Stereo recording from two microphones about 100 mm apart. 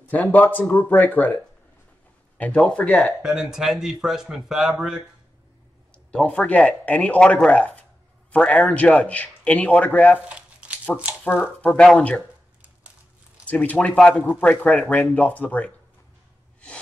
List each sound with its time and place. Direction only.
0.1 s a man's voice: 15° left (ahead or behind)
3.2 s speech: 5° right (ahead or behind)
6.1 s a man's voice: 10° left (ahead or behind)
10.2 s crumpling: 10° right (ahead or behind)
11.2 s a man's voice: 20° left (ahead or behind)
12.2 s a sound: 15° right (ahead or behind)
13.5 s a man's voice: 15° left (ahead or behind)